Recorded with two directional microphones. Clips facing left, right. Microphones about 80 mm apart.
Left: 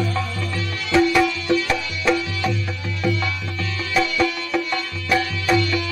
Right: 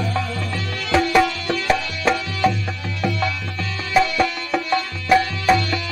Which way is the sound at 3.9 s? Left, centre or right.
Right.